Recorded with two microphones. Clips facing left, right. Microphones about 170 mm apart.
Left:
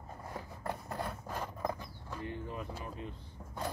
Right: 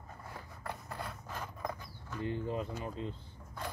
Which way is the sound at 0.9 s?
35° left (ahead or behind).